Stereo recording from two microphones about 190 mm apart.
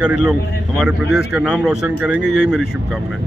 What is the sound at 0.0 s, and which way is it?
A man's voice, 5° right (ahead or behind).